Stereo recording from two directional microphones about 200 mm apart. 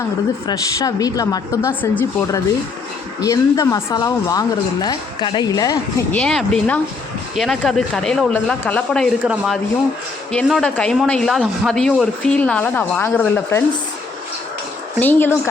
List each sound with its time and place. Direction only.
0.4 s a woman's voice: 15° left (ahead or behind)
6.1 s speech: 5° left (ahead or behind)
14.9 s a woman's voice: 10° left (ahead or behind)